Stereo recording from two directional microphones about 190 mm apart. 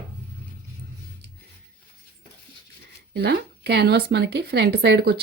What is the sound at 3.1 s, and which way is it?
Speech, 60° right (ahead or behind).